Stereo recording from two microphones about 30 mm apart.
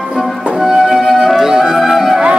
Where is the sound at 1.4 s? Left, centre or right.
Centre.